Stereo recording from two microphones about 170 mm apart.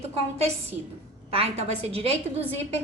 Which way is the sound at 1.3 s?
35° right (ahead or behind).